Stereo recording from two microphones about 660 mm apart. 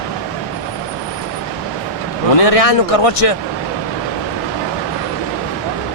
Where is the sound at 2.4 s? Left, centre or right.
Left.